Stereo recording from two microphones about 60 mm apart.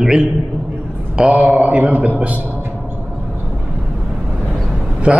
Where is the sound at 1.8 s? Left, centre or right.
Right.